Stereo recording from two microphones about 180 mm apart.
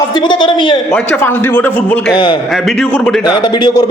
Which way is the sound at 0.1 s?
25° left (ahead or behind).